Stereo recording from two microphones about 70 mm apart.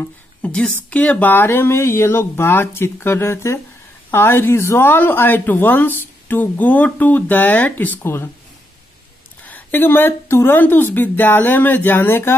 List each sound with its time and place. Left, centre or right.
0.4 s speech: centre
9.5 s speech: left